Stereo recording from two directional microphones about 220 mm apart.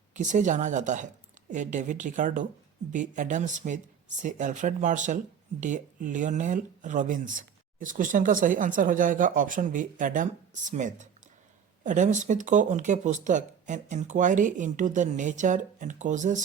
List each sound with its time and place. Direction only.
0.1 s speech: 35° right (ahead or behind)